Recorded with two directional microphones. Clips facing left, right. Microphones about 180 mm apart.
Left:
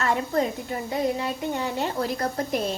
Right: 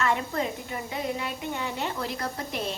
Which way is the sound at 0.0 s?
40° left (ahead or behind).